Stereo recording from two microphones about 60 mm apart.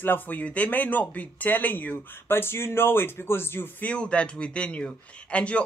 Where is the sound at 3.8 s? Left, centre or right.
Centre.